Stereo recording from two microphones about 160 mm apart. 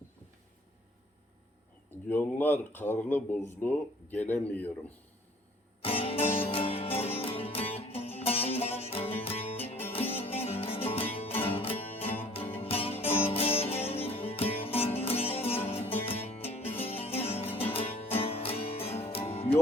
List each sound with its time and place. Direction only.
2.0 s speech: 10° left (ahead or behind)
5.8 s music: 35° left (ahead or behind)